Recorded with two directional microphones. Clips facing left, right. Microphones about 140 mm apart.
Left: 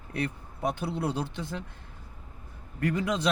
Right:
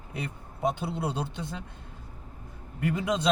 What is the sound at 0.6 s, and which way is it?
Speech, 20° right (ahead or behind).